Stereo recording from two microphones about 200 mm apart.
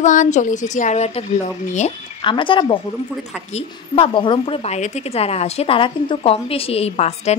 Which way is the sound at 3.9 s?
25° left (ahead or behind).